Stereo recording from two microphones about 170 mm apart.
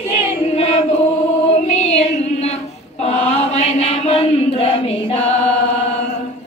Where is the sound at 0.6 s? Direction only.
40° left (ahead or behind).